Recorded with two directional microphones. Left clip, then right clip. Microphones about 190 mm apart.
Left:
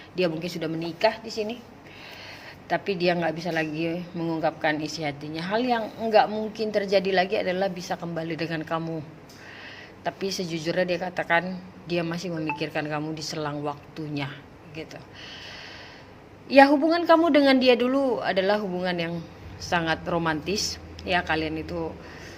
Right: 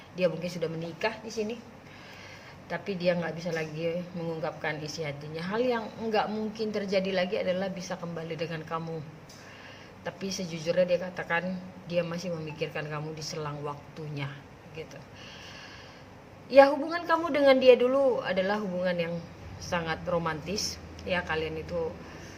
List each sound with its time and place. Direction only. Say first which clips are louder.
0.2 s a woman's voice: left 2 dB; 40° left (ahead or behind)
2.6 s a woman's voice: left 5 dB; 45° left (ahead or behind)
10.0 s a woman's voice: left 7 dB; 45° left (ahead or behind)
16.5 s a woman's voice: left 3 dB; 45° left (ahead or behind)